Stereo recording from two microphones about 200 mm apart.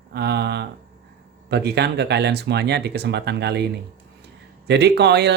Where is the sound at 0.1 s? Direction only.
55° right (ahead or behind).